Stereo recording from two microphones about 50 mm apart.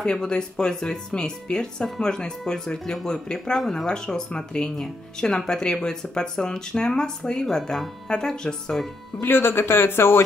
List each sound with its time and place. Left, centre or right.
0.0 s speech: centre
9.2 s a man's voice: left